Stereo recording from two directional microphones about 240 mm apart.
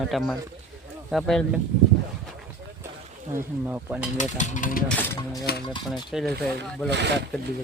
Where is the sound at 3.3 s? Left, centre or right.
Centre.